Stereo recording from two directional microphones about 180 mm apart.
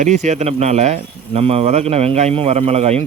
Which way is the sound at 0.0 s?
40° right (ahead or behind).